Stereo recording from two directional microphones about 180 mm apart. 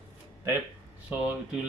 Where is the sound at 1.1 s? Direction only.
10° right (ahead or behind).